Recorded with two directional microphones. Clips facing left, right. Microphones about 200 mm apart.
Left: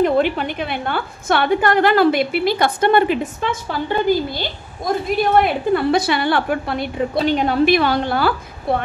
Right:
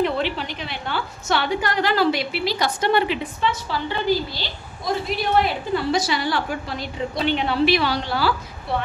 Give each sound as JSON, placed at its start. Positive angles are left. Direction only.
{"t": 0.0, "sound": "a woman's voice", "side_deg": 50}
{"t": 7.2, "sound": "a woman's voice", "side_deg": 40}